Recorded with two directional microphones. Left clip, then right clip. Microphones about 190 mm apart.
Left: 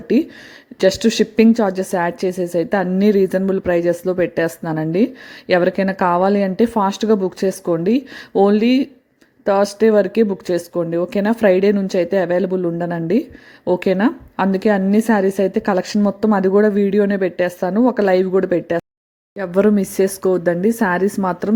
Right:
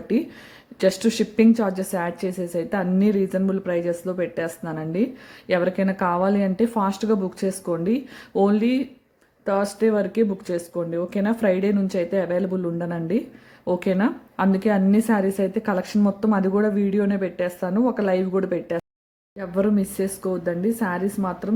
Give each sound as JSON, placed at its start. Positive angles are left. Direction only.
{"t": 0.1, "sound": "a woman's voice", "side_deg": 25}
{"t": 19.4, "sound": "speech", "side_deg": 40}